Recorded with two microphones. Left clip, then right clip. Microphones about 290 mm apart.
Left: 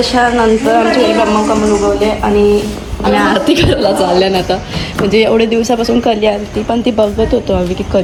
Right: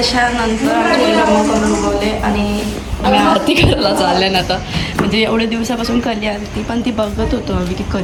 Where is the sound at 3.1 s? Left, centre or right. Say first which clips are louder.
Left 1 dB; centre.